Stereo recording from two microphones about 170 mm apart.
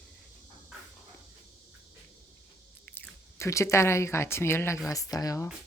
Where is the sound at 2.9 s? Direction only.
15° left (ahead or behind).